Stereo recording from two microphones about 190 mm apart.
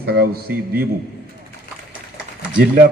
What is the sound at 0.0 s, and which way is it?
Speech, 55° right (ahead or behind).